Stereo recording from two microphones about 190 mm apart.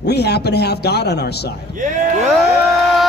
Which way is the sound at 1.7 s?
45° right (ahead or behind).